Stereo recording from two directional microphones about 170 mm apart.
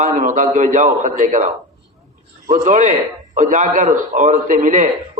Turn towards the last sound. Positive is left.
turn(degrees=-50)  # may be behind; listen again after turning